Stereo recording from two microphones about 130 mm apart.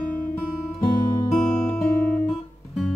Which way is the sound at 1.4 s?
5° left (ahead or behind).